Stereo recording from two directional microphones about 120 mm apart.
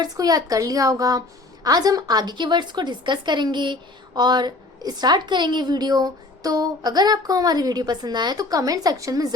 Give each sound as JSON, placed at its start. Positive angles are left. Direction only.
{"t": 0.0, "sound": "a woman's voice", "side_deg": -30}